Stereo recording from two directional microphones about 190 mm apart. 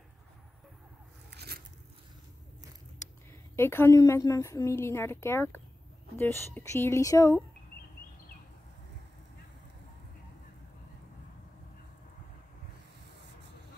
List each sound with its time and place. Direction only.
1.3 s biting: 55° right (ahead or behind)
3.5 s a woman's voice: 10° left (ahead or behind)